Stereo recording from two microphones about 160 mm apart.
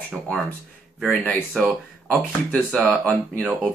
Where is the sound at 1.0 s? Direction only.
5° left (ahead or behind).